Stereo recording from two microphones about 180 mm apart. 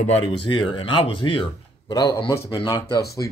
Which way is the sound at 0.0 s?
30° left (ahead or behind).